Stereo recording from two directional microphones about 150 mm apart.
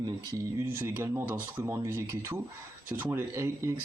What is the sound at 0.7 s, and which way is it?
Speech, 15° right (ahead or behind).